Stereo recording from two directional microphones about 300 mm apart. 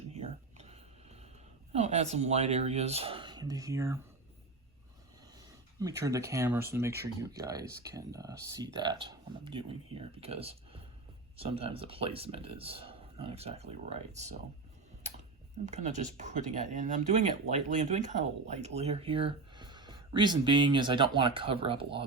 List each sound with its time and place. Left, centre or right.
0.1 s a sound: right
1.7 s speech: right
5.8 s speech: centre
15.6 s speech: right